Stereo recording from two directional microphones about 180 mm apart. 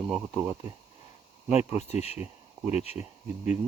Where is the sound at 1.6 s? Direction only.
35° left (ahead or behind).